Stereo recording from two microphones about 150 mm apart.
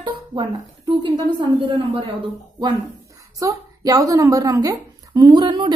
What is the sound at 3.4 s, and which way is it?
Speech, 25° right (ahead or behind).